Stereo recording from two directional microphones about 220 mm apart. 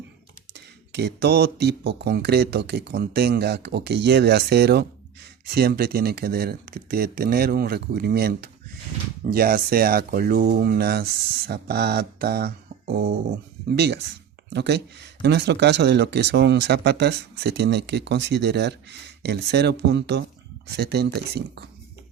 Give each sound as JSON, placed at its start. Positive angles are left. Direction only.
{"t": 0.5, "sound": "speech", "side_deg": -50}